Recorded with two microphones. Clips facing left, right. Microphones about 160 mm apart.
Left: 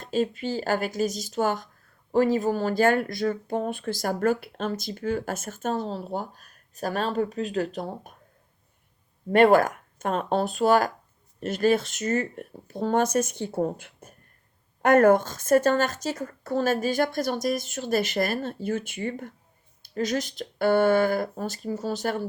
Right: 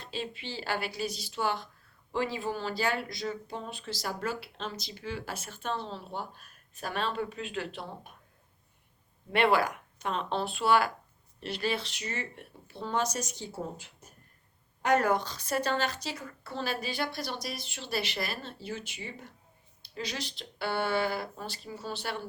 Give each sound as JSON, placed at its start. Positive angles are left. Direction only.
{"t": 0.0, "sound": "speech", "side_deg": 45}
{"t": 9.3, "sound": "speech", "side_deg": 45}